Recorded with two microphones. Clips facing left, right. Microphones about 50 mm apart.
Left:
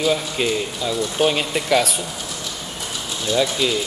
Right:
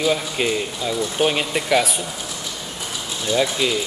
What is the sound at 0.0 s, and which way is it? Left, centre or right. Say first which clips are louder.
Speech: even; centre.